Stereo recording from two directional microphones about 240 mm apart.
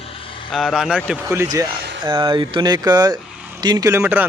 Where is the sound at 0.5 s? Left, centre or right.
Centre.